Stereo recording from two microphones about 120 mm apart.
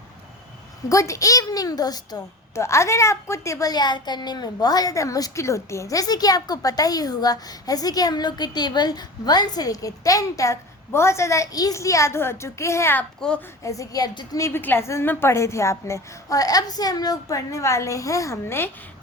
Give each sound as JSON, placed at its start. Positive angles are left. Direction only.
{"t": 0.9, "sound": "a woman's voice", "side_deg": 25}
{"t": 13.7, "sound": "a woman's voice", "side_deg": 30}